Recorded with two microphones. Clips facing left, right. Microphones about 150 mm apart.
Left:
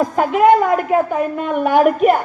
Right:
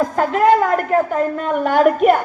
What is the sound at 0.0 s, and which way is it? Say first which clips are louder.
A woman's voice: left 2 dB; 15° left (ahead or behind).